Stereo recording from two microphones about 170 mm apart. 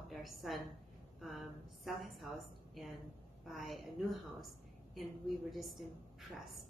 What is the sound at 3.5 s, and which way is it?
Speech, centre (ahead or behind).